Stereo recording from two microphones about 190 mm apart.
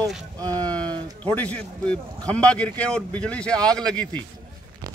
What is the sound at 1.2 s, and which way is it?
Speech, 10° left (ahead or behind).